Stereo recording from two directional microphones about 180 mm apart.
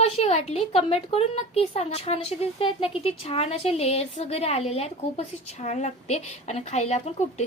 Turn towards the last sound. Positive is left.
turn(degrees=35)  # may be behind; listen again after turning